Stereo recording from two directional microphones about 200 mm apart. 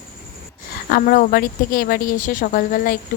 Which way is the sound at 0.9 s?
45° left (ahead or behind).